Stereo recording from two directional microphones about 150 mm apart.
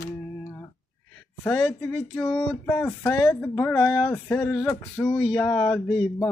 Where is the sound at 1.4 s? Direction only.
10° left (ahead or behind).